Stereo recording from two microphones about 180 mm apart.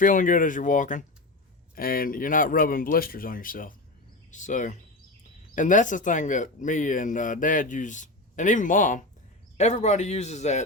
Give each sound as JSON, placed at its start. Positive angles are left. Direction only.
{"t": 0.0, "sound": "speech", "side_deg": 45}